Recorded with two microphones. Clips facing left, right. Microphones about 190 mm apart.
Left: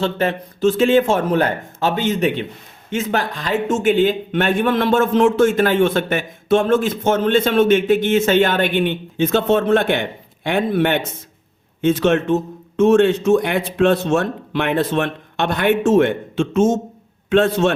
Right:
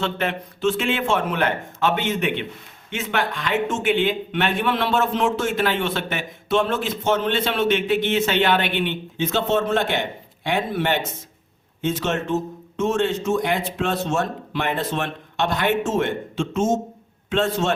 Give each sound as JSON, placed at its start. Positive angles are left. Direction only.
{"t": 0.0, "sound": "a man's voice", "side_deg": 35}